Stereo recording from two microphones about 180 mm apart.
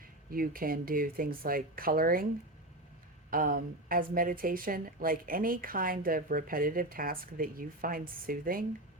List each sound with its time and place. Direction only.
0.3 s speech: 55° right (ahead or behind)
3.2 s speech: 50° right (ahead or behind)